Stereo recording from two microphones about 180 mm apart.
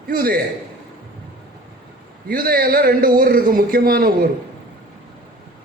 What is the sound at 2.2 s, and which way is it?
A man's voice, 55° right (ahead or behind).